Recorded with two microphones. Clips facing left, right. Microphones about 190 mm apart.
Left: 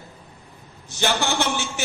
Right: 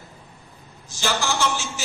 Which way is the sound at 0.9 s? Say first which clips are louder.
Left 2 dB; 60° left (ahead or behind).